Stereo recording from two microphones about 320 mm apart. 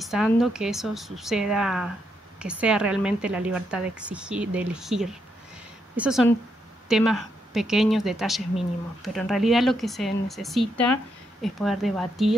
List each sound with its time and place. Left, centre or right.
0.0 s speech: centre